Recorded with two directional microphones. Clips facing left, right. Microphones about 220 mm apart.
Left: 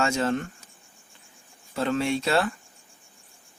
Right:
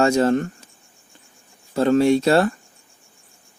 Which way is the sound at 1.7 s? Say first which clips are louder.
Right 9 dB; 40° right (ahead or behind).